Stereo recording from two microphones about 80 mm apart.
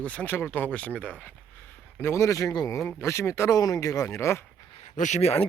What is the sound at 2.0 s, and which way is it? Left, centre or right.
Speech, left.